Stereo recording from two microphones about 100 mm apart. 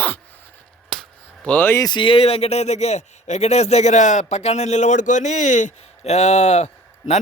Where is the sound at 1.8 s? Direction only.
55° left (ahead or behind); by 4.7 s 90° left.